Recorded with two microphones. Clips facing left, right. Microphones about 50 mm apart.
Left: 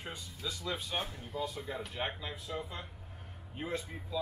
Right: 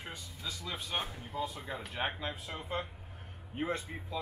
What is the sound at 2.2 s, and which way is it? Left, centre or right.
Speech, right.